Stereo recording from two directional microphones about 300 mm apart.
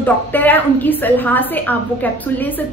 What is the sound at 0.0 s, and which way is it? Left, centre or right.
A woman's voice, centre.